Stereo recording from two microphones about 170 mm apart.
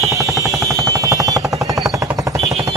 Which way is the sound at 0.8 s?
20° right (ahead or behind).